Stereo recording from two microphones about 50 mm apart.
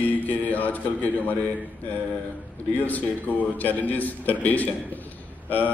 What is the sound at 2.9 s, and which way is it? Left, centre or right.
A man's voice, left.